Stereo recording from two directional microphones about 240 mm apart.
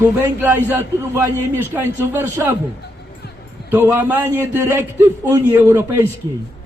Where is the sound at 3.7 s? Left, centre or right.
Centre.